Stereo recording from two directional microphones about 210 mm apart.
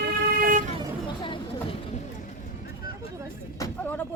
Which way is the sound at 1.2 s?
25° left (ahead or behind).